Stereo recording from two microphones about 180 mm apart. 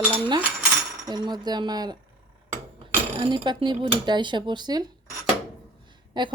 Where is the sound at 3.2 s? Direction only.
30° right (ahead or behind).